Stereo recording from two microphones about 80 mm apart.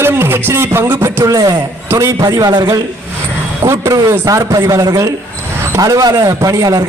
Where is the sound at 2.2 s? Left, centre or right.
Right.